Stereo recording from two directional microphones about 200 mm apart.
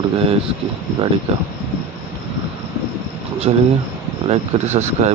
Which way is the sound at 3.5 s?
30° right (ahead or behind).